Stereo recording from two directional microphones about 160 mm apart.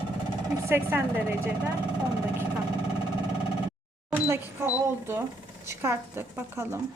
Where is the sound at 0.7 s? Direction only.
15° right (ahead or behind).